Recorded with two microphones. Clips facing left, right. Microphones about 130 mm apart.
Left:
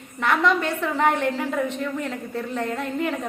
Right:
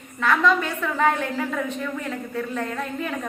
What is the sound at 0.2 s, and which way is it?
A woman's voice, 25° left (ahead or behind).